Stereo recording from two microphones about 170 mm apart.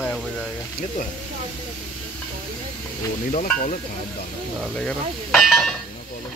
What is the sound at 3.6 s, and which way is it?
Speech, 55° left (ahead or behind).